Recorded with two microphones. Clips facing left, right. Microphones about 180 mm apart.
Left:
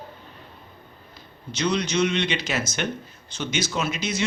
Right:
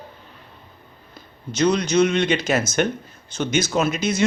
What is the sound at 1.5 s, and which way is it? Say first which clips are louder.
A man's voice: right 5 dB; 45° right (ahead or behind).